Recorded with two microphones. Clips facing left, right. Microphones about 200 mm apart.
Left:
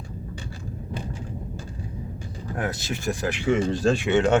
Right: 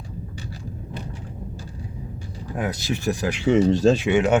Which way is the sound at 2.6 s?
15° right (ahead or behind).